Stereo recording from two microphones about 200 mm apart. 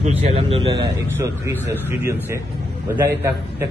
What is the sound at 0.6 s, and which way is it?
A man's voice, 15° right (ahead or behind).